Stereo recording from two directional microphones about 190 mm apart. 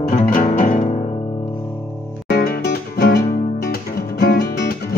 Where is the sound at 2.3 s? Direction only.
55° left (ahead or behind).